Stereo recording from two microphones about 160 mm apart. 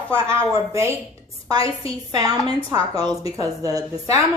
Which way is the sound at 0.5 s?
20° right (ahead or behind).